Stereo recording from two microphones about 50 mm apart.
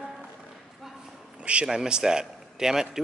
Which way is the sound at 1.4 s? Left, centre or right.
Right.